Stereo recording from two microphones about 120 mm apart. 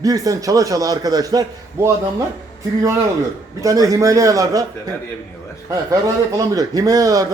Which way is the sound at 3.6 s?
30° right (ahead or behind).